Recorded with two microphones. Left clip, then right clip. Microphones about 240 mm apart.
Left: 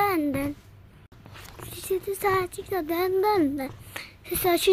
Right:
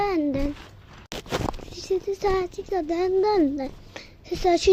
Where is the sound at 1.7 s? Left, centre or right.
Centre.